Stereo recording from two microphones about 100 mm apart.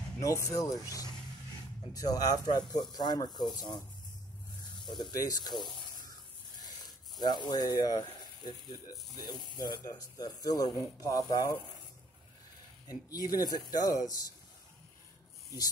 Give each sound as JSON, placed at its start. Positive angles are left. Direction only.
{"t": 0.2, "sound": "speech", "side_deg": 35}
{"t": 5.1, "sound": "speech", "side_deg": 35}
{"t": 7.2, "sound": "speech", "side_deg": 50}
{"t": 12.8, "sound": "speech", "side_deg": 40}